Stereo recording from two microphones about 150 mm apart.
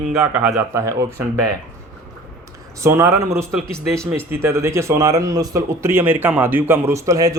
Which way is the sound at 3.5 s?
5° left (ahead or behind).